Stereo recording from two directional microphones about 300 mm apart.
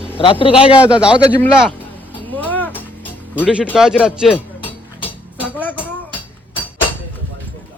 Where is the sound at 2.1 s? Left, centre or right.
Centre.